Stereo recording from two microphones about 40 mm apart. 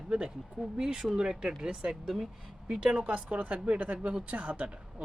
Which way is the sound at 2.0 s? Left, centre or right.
Centre.